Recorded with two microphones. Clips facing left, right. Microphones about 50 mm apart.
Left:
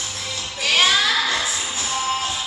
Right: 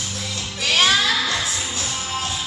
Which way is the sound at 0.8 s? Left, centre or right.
Centre.